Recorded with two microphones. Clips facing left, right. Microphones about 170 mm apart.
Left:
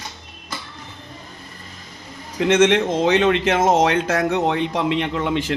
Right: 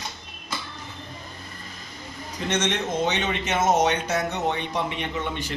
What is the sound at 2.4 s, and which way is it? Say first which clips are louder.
Speech: left 11 dB; 90° left.